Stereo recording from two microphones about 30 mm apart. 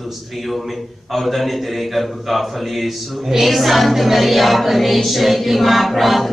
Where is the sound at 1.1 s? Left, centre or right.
Centre.